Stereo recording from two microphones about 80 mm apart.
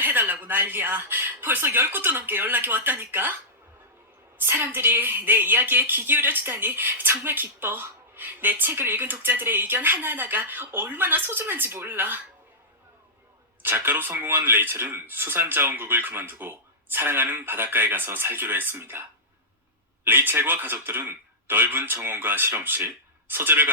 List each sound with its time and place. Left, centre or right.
0.0 s a woman's voice: right
4.4 s a woman's voice: right
13.6 s a woman's voice: right
20.1 s a woman's voice: right